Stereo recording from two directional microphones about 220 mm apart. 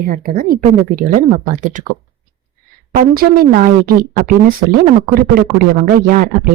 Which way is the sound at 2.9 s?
40° right (ahead or behind).